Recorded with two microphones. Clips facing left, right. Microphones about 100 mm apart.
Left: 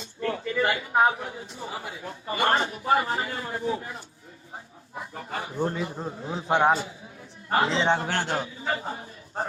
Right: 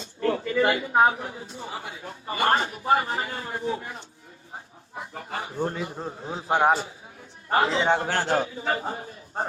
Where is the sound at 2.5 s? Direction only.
30° left (ahead or behind).